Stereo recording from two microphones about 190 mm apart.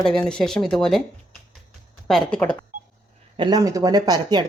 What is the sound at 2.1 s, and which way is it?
Speech, 5° left (ahead or behind).